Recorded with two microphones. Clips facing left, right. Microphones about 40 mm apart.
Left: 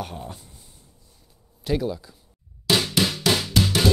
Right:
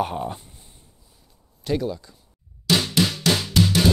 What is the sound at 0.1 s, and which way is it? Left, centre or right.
Speech, right.